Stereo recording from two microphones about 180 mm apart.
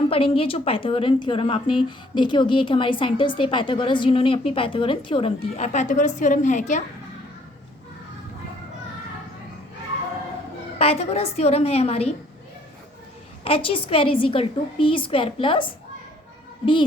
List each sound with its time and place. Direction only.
0.1 s a woman's voice: 30° left (ahead or behind)
10.8 s a woman's voice: 35° left (ahead or behind)
13.4 s a woman's voice: 30° left (ahead or behind)